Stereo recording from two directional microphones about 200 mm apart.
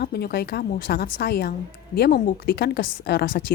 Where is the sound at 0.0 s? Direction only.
50° left (ahead or behind).